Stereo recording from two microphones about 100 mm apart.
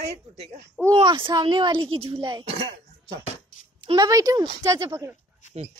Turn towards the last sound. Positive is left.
turn(degrees=-30)  # may be behind; listen again after turning